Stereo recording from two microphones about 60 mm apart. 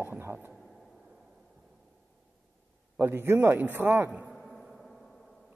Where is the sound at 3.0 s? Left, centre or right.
Right.